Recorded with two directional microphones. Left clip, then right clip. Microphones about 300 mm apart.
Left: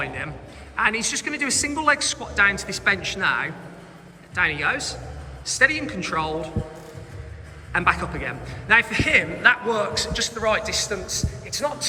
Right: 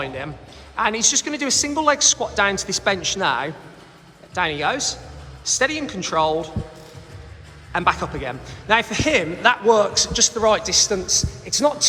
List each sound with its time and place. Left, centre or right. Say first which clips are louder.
0.0 s a man's voice: right 1 dB; centre
7.7 s a man's voice: right 1 dB; centre